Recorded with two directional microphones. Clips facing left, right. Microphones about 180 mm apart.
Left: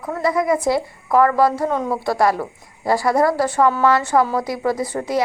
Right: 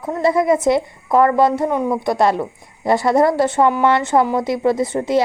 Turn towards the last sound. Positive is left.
turn(degrees=-25)  # may be behind; listen again after turning